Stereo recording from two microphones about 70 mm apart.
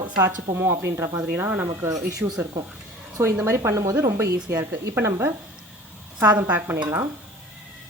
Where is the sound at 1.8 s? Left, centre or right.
Right.